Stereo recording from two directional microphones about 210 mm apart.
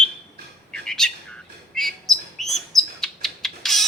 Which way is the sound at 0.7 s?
5° left (ahead or behind).